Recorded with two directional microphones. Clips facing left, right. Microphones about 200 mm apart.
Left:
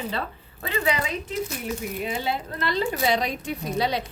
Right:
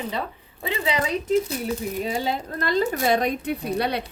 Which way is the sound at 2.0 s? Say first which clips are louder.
Right 2 dB; 40° right (ahead or behind).